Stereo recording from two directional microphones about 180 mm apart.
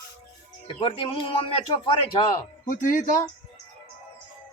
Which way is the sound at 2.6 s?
45° left (ahead or behind).